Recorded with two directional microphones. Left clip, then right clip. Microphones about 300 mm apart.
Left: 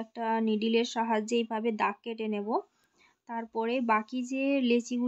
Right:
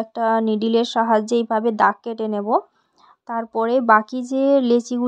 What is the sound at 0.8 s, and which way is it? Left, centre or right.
Speech, centre.